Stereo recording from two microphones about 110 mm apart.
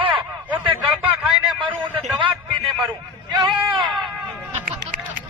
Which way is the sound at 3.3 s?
45° right (ahead or behind).